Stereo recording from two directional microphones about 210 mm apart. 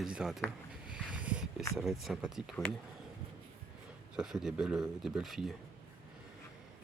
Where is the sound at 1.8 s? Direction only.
Centre (ahead or behind).